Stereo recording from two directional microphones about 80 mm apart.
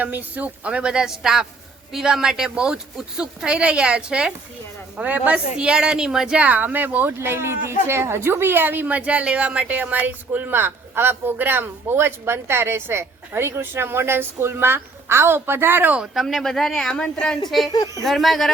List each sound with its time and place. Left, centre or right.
0.0 s a woman's voice: right
16.2 s speech: centre
17.7 s a woman's voice: left
18.0 s speech: centre